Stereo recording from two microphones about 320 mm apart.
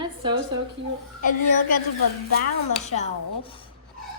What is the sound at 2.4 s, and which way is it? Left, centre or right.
Chopping, left.